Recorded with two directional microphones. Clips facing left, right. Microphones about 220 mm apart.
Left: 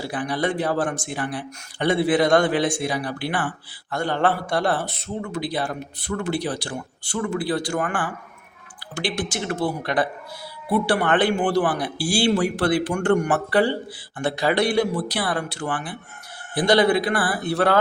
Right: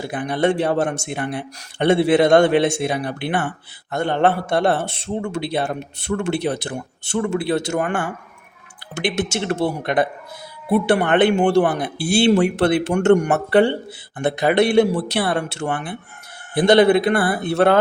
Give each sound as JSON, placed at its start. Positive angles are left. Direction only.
{"t": 0.0, "sound": "a man's voice", "side_deg": -20}